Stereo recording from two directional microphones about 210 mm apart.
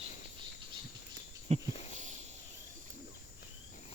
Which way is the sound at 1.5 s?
30° right (ahead or behind).